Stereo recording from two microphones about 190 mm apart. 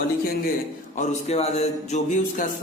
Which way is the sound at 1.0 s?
35° left (ahead or behind).